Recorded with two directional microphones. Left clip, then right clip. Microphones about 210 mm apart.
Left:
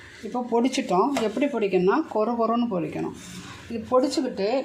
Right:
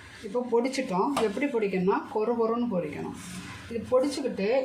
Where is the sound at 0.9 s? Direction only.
40° left (ahead or behind).